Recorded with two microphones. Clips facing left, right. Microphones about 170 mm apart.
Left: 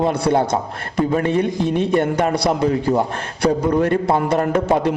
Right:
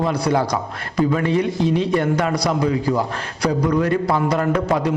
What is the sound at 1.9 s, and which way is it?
A man's voice, 25° left (ahead or behind).